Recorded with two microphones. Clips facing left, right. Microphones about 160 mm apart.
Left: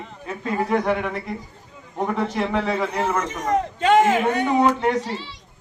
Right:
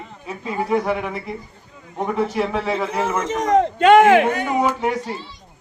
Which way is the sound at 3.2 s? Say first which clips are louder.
Right 5 dB; 90° right.